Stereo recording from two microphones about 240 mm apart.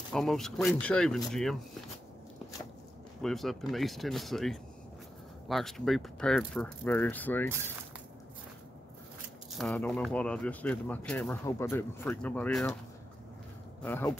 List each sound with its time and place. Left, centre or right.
0.1 s speech: centre
3.2 s speech: centre
9.5 s speech: centre
13.8 s speech: centre